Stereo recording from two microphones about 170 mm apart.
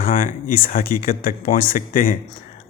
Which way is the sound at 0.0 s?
55° left (ahead or behind).